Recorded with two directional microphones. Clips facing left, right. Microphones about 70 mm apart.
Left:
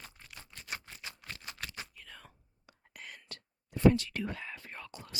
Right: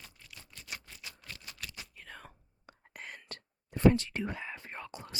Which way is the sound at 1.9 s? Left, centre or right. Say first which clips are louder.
Right 3 dB; right.